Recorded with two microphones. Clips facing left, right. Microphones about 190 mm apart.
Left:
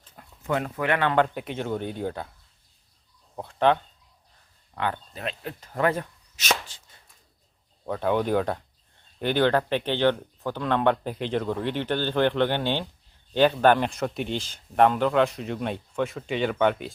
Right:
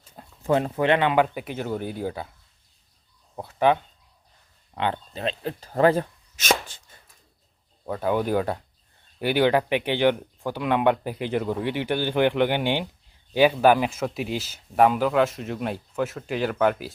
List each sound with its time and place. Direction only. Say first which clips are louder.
0.2 s speech: right 5 dB; 30° right (ahead or behind)
1.1 s speech: right 1 dB; 5° right (ahead or behind)
3.3 s speech: right 1 dB; 5° right (ahead or behind)
4.7 s speech: right 2 dB; 25° right (ahead or behind)
6.3 s chopping: right 4 dB; 50° right (ahead or behind)
7.9 s speech: even; 5° right (ahead or behind)